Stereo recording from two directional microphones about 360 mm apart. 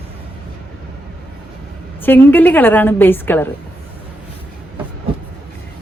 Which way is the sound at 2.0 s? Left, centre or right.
Centre.